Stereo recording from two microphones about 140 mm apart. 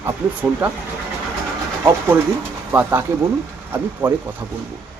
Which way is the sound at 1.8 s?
15° right (ahead or behind).